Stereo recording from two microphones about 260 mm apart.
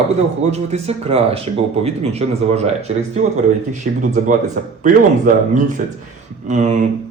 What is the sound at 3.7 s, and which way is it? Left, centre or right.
Speech, right.